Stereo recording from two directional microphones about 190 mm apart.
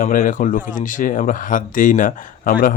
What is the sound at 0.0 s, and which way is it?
Speech, 45° left (ahead or behind).